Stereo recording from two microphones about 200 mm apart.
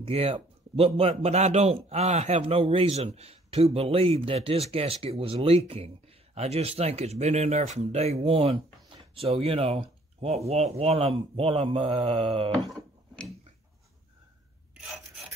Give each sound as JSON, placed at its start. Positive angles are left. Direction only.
{"t": 0.0, "sound": "a man's voice", "side_deg": -30}